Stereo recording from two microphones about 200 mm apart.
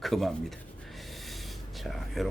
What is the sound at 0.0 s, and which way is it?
Speech, centre (ahead or behind).